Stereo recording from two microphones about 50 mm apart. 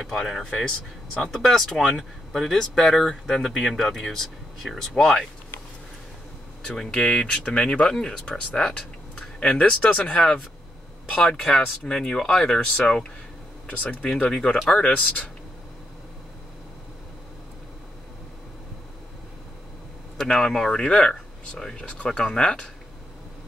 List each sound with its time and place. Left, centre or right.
0.3 s speech: centre
6.7 s speech: centre
11.2 s speech: centre
13.7 s speech: left
14.0 s speech: centre
14.8 s speech: left
20.2 s speech: centre